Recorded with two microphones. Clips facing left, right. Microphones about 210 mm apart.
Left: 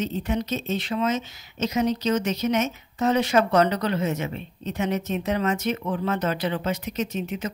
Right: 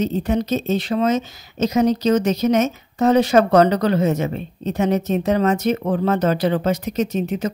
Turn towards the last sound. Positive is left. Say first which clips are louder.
# right 7 dB
turn(degrees=-40)  # may be behind; listen again after turning